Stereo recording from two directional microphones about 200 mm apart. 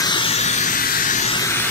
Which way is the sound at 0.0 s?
25° left (ahead or behind).